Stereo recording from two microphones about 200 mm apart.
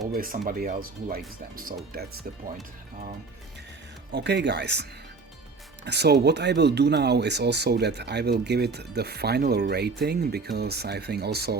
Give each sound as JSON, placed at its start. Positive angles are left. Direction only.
{"t": 0.1, "sound": "speech", "side_deg": -45}
{"t": 4.1, "sound": "speech", "side_deg": -60}